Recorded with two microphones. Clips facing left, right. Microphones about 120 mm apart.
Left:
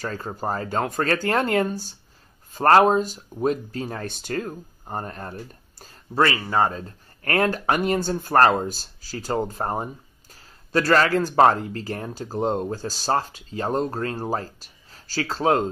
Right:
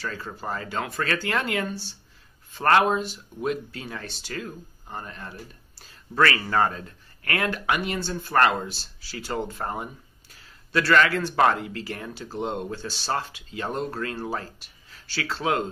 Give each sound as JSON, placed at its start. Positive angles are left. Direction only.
{"t": 0.0, "sound": "speech", "side_deg": 40}
{"t": 6.1, "sound": "a man's voice", "side_deg": 25}
{"t": 6.8, "sound": "speech", "side_deg": 40}